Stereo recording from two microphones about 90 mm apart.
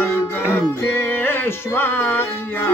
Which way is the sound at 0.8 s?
20° left (ahead or behind).